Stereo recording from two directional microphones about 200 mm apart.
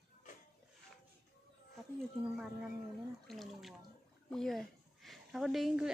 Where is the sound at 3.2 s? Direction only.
Centre (ahead or behind).